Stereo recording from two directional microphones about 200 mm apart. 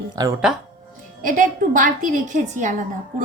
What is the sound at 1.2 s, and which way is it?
A woman's voice, 40° right (ahead or behind).